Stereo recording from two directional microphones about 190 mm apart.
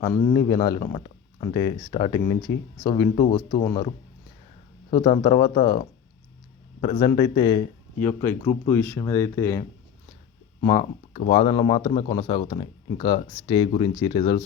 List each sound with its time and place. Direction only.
0.0 s speech: 20° left (ahead or behind)
3.6 s speech: 15° left (ahead or behind)
4.9 s speech: 25° left (ahead or behind)
6.8 s speech: 25° left (ahead or behind)
7.9 s speech: 10° left (ahead or behind)
10.6 s speech: 25° left (ahead or behind)